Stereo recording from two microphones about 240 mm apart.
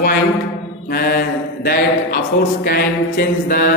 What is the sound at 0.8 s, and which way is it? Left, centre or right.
A man's voice, left.